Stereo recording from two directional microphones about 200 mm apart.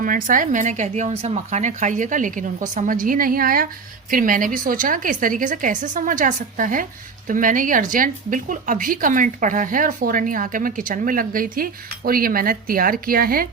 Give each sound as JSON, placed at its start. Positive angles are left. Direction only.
{"t": 0.0, "sound": "speech", "side_deg": -40}